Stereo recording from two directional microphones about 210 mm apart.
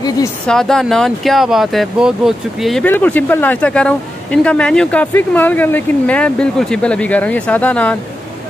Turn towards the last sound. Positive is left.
turn(degrees=5)  # may be behind; listen again after turning